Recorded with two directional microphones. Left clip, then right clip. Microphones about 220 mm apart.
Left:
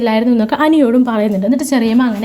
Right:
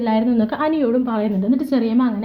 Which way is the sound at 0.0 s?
30° left (ahead or behind).